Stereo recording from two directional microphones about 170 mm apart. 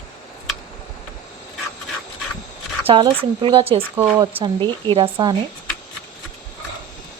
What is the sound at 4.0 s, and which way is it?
A woman's voice, 20° right (ahead or behind).